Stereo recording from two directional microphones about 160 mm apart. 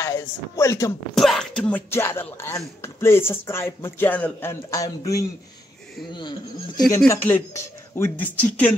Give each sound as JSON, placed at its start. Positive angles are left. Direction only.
{"t": 0.0, "sound": "speech", "side_deg": 20}
{"t": 1.1, "sound": "speech", "side_deg": 0}
{"t": 7.1, "sound": "speech", "side_deg": 15}